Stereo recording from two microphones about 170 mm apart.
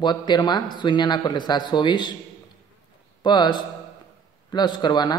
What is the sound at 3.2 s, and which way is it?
A man's voice, 25° left (ahead or behind).